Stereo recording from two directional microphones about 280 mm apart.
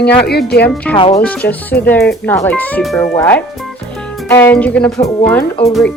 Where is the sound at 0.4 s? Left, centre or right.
Left.